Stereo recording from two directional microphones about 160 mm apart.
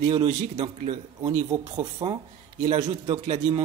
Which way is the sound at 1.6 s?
30° right (ahead or behind).